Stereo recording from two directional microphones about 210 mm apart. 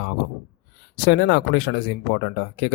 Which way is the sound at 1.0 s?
55° left (ahead or behind).